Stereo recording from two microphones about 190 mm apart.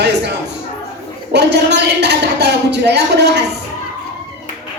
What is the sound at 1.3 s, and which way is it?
Speech, 65° right (ahead or behind).